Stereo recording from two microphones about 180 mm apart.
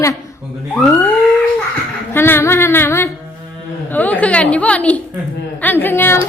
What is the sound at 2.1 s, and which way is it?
A woman's voice, 10° left (ahead or behind).